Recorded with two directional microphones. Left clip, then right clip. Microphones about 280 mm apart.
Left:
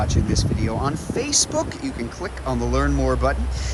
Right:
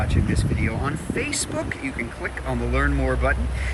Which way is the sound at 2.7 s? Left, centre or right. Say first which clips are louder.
Left 1 dB; centre.